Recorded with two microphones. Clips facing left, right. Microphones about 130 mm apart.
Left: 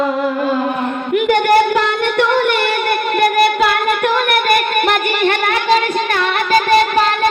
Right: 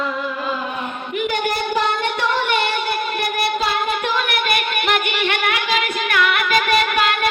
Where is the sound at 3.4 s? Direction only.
60° left (ahead or behind).